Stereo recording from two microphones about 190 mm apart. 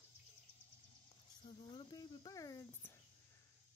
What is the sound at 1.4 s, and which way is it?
Cricket, 30° left (ahead or behind).